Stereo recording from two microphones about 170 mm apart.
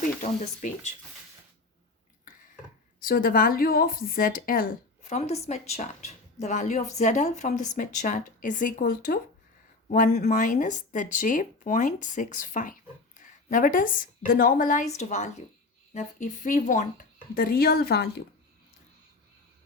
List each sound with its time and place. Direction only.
0.2 s a woman's voice: 45° left (ahead or behind)
3.0 s speech: 55° left (ahead or behind)
5.0 s a woman's voice: 40° left (ahead or behind); by 18.2 s 70° left (ahead or behind)